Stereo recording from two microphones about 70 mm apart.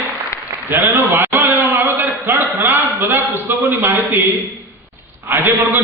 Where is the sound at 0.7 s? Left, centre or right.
Right.